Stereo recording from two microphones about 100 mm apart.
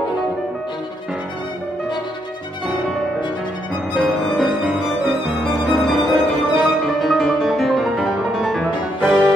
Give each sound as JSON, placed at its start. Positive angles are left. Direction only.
{"t": 3.9, "sound": "music", "side_deg": 0}